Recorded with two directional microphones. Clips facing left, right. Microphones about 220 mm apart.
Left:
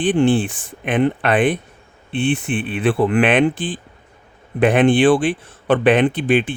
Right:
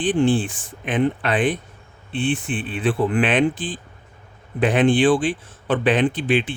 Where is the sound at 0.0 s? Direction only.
65° left (ahead or behind).